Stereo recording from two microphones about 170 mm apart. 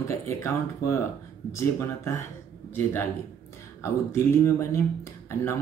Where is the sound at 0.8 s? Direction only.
55° left (ahead or behind).